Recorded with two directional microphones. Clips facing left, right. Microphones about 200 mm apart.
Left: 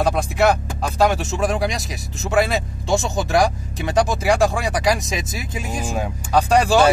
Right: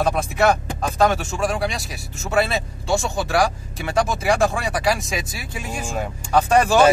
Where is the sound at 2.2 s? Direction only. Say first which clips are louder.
Left 2 dB; 15° left (ahead or behind).